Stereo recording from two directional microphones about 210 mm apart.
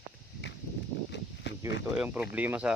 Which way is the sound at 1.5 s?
55° left (ahead or behind).